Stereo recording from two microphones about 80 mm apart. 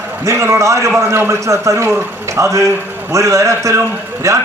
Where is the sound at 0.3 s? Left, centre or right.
Right.